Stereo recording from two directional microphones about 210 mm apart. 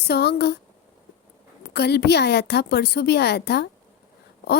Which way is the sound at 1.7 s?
50° left (ahead or behind).